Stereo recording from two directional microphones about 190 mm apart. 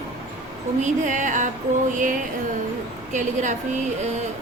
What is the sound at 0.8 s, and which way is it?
A woman's voice, 40° right (ahead or behind).